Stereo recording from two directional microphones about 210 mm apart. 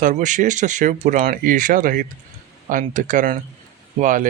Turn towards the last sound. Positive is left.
turn(degrees=-40)  # may be behind; listen again after turning